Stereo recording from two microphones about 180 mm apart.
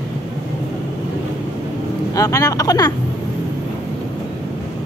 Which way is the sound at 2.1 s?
15° left (ahead or behind).